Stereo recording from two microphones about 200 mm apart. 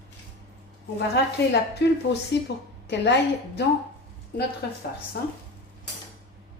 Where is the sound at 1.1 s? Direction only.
55° left (ahead or behind).